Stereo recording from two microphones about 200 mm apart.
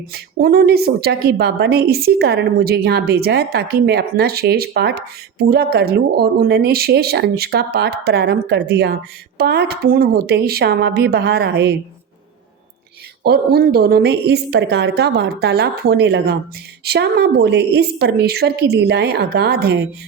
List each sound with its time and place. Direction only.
0.1 s a woman's voice: 50° right (ahead or behind)
13.2 s a woman's voice: 50° right (ahead or behind)